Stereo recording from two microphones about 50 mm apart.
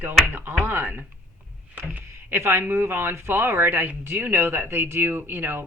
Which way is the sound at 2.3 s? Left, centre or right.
Right.